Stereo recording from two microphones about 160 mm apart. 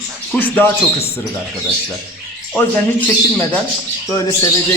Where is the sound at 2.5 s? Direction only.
10° left (ahead or behind).